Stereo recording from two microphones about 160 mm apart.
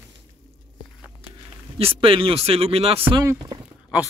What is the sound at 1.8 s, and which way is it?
Speech, 35° right (ahead or behind).